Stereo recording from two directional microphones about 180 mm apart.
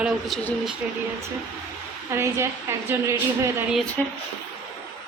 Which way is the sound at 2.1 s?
15° right (ahead or behind).